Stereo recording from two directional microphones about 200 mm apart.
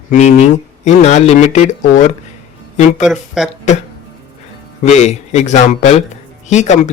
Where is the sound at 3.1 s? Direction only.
Centre (ahead or behind).